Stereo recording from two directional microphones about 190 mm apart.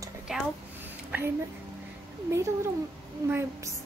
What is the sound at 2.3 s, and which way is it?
A woman's voice, 15° right (ahead or behind).